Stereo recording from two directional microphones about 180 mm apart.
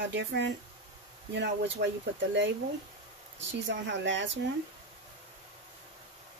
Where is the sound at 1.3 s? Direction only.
75° right (ahead or behind).